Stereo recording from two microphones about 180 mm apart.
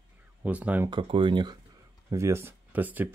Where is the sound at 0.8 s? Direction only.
25° right (ahead or behind).